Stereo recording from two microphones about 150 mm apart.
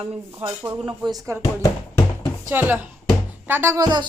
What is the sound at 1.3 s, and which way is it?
Speech, 20° right (ahead or behind).